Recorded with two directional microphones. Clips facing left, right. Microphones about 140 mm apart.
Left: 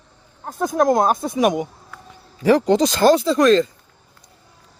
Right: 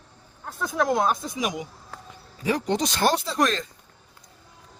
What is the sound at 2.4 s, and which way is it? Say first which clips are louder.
Speech: left 10 dB; 90° left.